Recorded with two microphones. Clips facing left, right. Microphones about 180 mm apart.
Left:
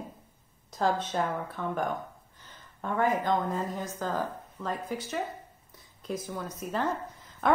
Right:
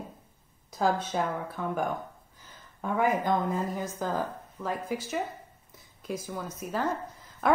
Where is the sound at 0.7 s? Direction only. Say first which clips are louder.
Right 1 dB; 5° right (ahead or behind).